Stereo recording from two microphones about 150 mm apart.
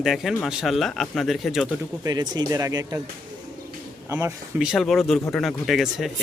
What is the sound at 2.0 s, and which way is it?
Speech, 25° right (ahead or behind).